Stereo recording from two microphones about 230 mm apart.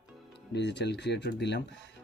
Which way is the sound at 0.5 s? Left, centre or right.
Left.